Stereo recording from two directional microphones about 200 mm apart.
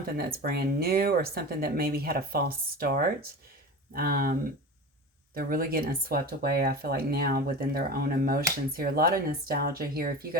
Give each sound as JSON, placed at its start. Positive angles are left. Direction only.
{"t": 0.2, "sound": "speech", "side_deg": -50}